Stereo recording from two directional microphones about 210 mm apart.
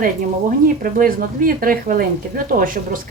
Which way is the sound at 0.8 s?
40° right (ahead or behind).